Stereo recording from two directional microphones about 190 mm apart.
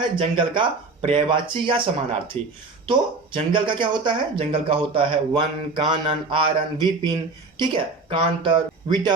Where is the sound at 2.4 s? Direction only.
5° left (ahead or behind).